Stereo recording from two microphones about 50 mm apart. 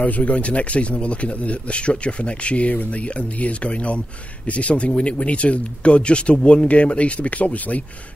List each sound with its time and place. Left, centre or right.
0.0 s speech: left